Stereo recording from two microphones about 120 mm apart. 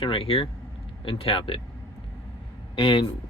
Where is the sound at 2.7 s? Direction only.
45° left (ahead or behind).